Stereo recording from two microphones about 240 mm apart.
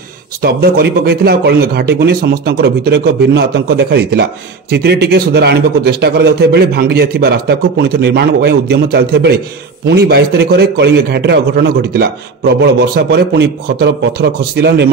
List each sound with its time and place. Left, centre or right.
0.4 s a man's voice: right